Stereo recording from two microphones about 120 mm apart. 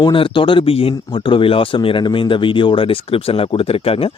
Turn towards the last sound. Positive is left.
turn(degrees=55)  # may be behind; listen again after turning